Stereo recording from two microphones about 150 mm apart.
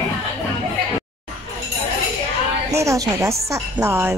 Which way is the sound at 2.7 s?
20° right (ahead or behind).